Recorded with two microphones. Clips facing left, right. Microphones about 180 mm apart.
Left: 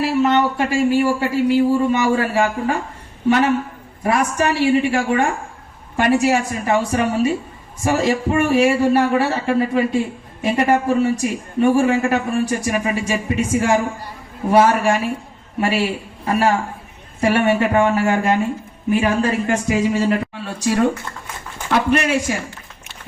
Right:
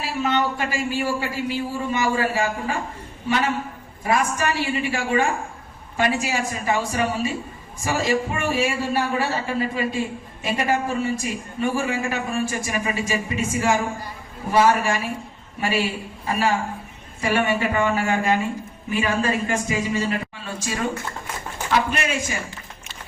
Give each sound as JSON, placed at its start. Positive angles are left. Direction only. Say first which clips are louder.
{"t": 0.0, "sound": "a woman's voice", "louder": "left 7 dB", "side_deg": 65}